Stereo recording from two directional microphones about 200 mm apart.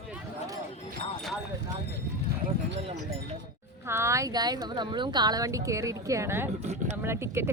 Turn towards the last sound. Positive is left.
turn(degrees=-10)  # may be behind; listen again after turning